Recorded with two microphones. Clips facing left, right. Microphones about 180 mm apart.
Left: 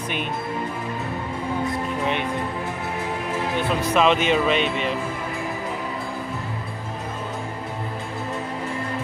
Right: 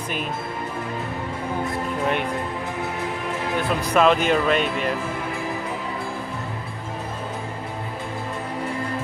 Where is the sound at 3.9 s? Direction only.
Centre (ahead or behind).